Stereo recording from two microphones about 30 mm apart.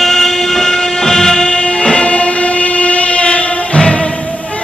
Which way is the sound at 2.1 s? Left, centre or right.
Left.